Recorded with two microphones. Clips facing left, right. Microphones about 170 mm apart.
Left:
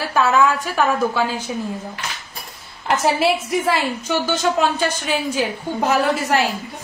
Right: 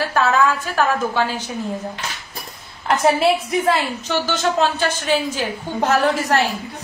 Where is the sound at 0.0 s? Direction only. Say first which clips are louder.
Even; 10° left (ahead or behind).